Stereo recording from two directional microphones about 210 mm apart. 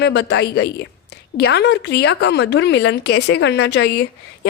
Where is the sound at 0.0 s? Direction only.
55° left (ahead or behind).